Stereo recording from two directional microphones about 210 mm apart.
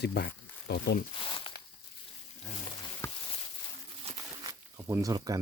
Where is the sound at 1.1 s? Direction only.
25° left (ahead or behind).